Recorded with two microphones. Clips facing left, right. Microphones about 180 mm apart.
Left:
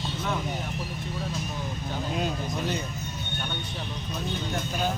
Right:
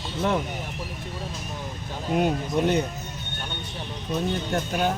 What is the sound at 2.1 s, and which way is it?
Speech, 60° right (ahead or behind).